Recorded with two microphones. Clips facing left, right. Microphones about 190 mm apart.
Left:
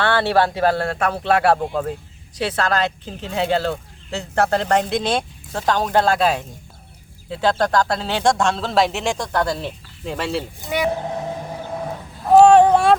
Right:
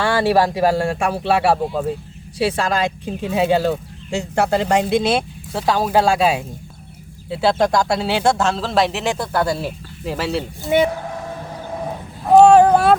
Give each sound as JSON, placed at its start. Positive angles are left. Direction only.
{"t": 0.0, "sound": "speech", "side_deg": -10}
{"t": 10.9, "sound": "vehicle", "side_deg": 20}
{"t": 12.3, "sound": "a sound", "side_deg": 0}